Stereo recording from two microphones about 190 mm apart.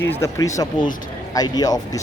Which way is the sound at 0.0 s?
15° left (ahead or behind).